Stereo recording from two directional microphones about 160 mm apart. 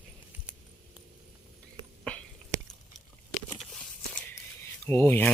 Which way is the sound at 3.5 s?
Centre (ahead or behind).